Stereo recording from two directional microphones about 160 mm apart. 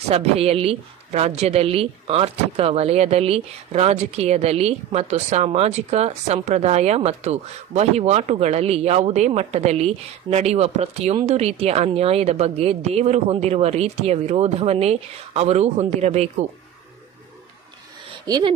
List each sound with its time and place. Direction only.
0.1 s a woman's voice: 40° right (ahead or behind)
18.2 s speech: 25° right (ahead or behind)